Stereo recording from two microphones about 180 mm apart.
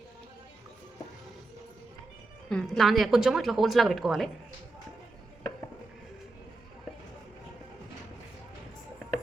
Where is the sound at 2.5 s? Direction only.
5° left (ahead or behind).